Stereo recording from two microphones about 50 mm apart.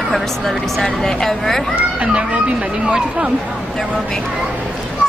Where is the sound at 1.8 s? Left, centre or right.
Right.